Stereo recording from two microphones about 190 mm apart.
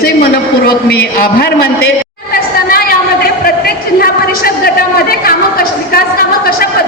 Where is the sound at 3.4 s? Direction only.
50° left (ahead or behind).